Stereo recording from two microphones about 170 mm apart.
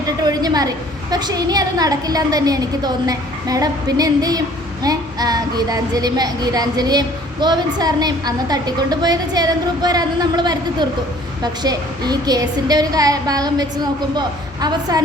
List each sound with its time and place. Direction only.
0.2 s a woman's voice: 25° right (ahead or behind)